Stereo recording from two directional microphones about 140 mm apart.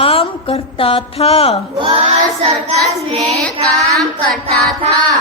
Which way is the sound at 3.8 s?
Centre (ahead or behind).